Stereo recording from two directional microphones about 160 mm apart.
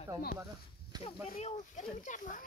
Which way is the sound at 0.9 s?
25° right (ahead or behind).